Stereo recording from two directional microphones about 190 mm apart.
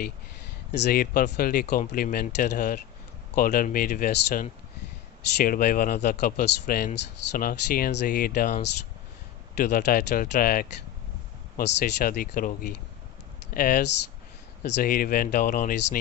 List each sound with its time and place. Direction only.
0.7 s speech: 50° left (ahead or behind)